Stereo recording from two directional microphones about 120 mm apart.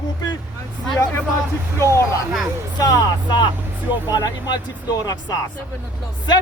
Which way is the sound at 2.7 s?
35° left (ahead or behind).